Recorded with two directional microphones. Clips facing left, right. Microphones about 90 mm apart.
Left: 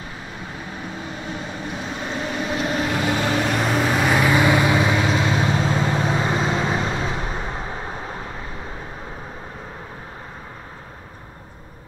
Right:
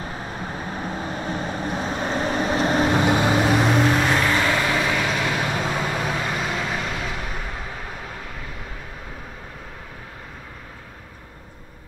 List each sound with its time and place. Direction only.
0.3 s vehicle: 40° right (ahead or behind); by 3.4 s 20° right (ahead or behind)
3.4 s vehicle: 5° right (ahead or behind); by 8.5 s 30° left (ahead or behind)